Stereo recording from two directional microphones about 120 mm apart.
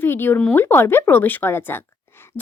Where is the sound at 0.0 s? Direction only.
20° left (ahead or behind).